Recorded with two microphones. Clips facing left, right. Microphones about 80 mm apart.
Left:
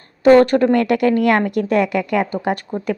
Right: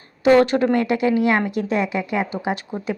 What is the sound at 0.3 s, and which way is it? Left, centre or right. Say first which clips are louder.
A woman's voice: left 4 dB; left.